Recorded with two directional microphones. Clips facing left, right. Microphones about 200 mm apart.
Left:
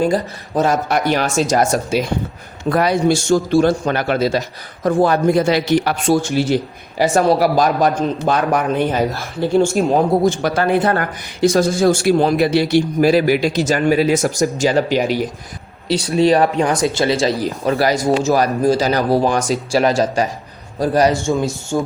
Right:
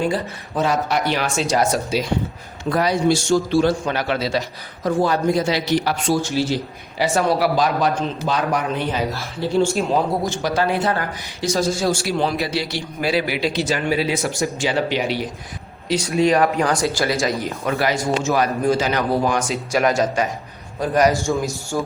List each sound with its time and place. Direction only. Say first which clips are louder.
0.0 s a man's voice: left 5 dB; 40° left (ahead or behind)
15.9 s speech: left 3 dB; 30° left (ahead or behind)
21.3 s a man's voice: left 4 dB; 15° left (ahead or behind)